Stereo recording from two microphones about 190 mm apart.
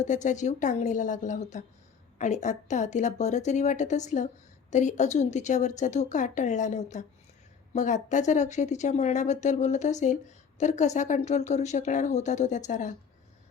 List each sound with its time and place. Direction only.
0.0 s speech: 40° left (ahead or behind)